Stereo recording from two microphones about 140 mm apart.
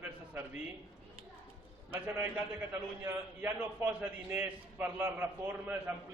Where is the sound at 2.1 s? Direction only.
10° right (ahead or behind).